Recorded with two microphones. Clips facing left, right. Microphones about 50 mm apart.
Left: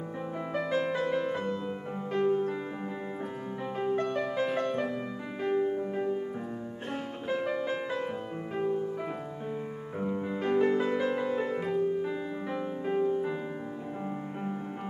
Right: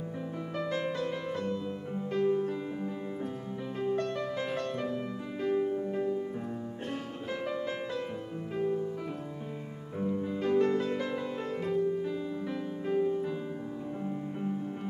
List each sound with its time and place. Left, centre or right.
0.6 s music: centre
2.1 s music: left
3.9 s music: centre
7.2 s music: centre
9.9 s music: left
10.6 s music: centre